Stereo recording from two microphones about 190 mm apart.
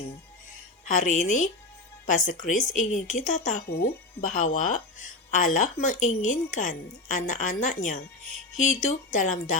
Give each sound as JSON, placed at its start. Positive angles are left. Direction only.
{"t": 0.9, "sound": "a woman's voice", "side_deg": 40}